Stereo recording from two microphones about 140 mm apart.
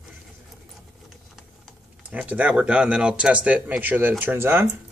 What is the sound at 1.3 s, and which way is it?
Speech, 5° right (ahead or behind).